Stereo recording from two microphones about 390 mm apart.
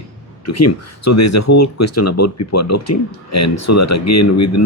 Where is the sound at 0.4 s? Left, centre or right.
Left.